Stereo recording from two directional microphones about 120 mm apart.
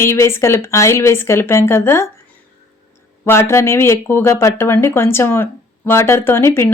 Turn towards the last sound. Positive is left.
turn(degrees=20)  # may be behind; listen again after turning